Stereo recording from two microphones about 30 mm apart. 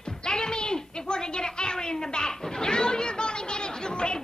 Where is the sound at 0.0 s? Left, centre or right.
Left.